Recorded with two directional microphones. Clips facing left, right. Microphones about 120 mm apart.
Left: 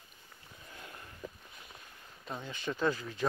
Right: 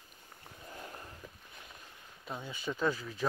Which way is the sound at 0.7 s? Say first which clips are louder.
Right 3 dB; 40° right (ahead or behind).